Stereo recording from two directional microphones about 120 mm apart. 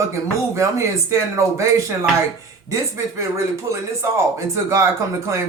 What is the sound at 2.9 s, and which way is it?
Speech, 25° right (ahead or behind).